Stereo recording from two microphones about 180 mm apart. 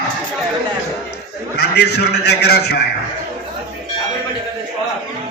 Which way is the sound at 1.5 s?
70° left (ahead or behind).